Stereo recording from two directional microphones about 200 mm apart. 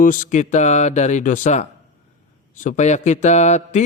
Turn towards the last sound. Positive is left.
turn(degrees=35)  # may be behind; listen again after turning